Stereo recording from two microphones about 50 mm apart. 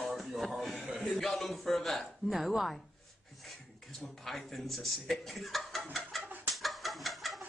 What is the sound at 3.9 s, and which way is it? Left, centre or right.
Speech, centre.